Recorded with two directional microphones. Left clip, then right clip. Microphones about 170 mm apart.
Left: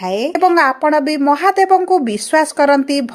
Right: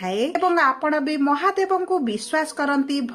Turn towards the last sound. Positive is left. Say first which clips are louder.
# left 10 dB
turn(degrees=45)  # may be behind; listen again after turning